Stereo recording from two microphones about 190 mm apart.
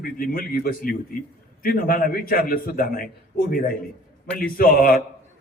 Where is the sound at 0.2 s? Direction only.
50° left (ahead or behind).